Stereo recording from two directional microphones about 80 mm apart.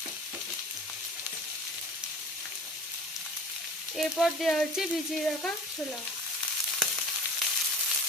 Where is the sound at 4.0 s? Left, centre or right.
Centre.